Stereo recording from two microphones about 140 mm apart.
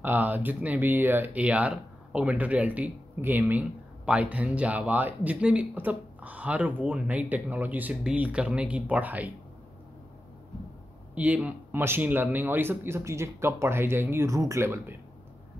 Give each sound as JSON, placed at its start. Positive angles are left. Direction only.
{"t": 0.0, "sound": "speech", "side_deg": -10}
{"t": 11.1, "sound": "speech", "side_deg": -10}